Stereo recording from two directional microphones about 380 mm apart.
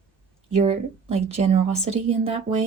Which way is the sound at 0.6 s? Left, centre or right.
Centre.